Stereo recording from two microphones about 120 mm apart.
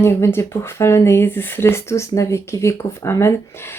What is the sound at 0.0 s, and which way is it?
Speech, 20° left (ahead or behind).